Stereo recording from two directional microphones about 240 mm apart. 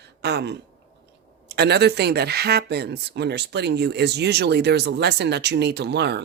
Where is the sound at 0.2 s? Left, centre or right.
Right.